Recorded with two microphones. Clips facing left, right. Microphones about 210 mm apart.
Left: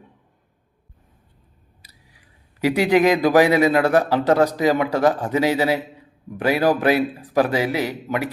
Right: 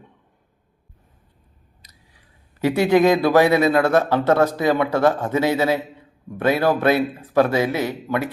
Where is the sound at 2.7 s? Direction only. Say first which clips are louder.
Right 1 dB; 15° left (ahead or behind).